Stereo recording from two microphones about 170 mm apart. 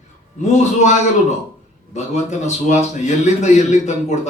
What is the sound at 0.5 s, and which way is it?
A man's voice, 45° left (ahead or behind).